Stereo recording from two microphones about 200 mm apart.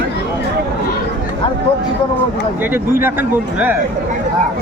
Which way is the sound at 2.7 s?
10° right (ahead or behind).